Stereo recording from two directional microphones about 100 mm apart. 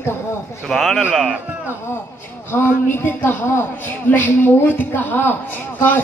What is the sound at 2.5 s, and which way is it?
A woman's voice, 20° left (ahead or behind).